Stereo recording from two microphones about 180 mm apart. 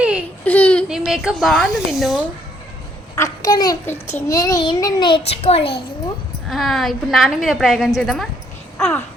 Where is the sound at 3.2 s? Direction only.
20° left (ahead or behind).